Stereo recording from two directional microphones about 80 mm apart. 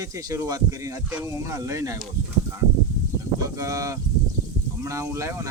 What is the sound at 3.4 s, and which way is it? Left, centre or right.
Speech, right.